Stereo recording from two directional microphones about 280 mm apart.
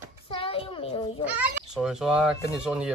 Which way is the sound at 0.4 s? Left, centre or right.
Centre.